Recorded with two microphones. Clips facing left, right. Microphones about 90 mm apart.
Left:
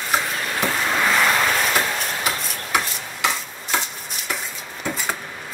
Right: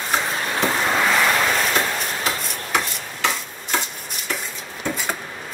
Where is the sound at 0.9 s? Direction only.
Centre (ahead or behind).